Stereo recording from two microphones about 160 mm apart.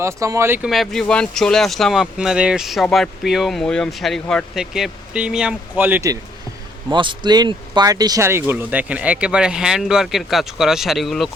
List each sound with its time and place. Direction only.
0.0 s speech: 20° right (ahead or behind)
0.7 s speech: centre (ahead or behind); by 6.1 s 15° right (ahead or behind)
6.9 s speech: 30° right (ahead or behind); by 11.3 s centre (ahead or behind)